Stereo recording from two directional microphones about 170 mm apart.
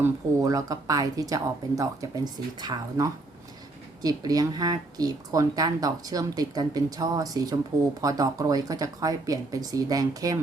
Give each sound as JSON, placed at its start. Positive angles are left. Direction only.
{"t": 0.0, "sound": "speech", "side_deg": -20}